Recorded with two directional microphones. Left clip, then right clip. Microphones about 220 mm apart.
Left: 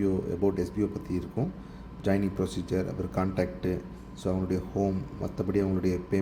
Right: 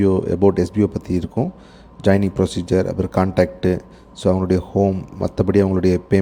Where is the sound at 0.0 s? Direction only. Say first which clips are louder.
Right 12 dB; 30° right (ahead or behind).